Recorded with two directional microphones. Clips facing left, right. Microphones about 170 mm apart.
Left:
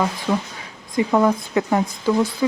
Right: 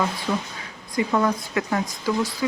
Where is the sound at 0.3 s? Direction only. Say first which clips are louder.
Left 4 dB; 15° left (ahead or behind).